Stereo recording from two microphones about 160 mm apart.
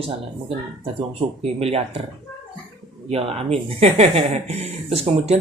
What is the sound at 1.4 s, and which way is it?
Speech, 40° right (ahead or behind).